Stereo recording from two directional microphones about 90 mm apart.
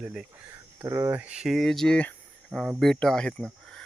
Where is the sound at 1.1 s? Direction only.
15° right (ahead or behind).